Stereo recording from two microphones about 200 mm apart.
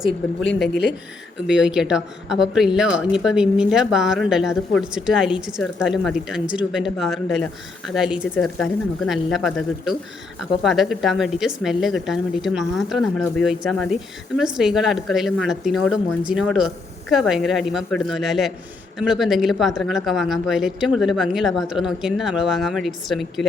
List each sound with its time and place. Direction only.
0.7 s speech: 60° left (ahead or behind)
1.5 s a woman's voice: 5° right (ahead or behind)